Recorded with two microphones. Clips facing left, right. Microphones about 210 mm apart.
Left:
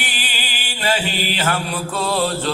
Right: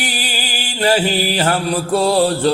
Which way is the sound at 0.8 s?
40° right (ahead or behind).